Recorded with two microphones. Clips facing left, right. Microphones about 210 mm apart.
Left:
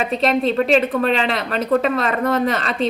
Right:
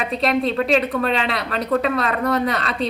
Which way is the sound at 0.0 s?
Centre (ahead or behind).